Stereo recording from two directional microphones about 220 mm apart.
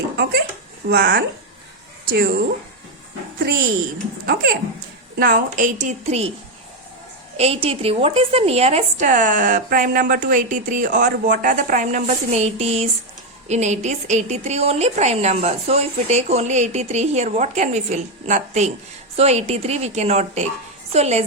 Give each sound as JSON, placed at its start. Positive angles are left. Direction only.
{"t": 0.9, "sound": "speech", "side_deg": -45}
{"t": 3.3, "sound": "a woman's voice", "side_deg": -40}
{"t": 7.3, "sound": "a woman's voice", "side_deg": -25}